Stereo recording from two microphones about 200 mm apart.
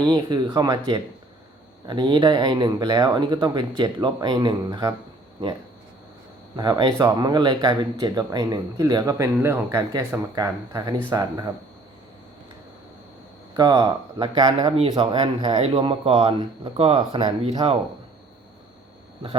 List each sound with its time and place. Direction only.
0.0 s speech: 20° right (ahead or behind)
6.6 s speech: 20° right (ahead or behind)
13.6 s speech: 20° right (ahead or behind)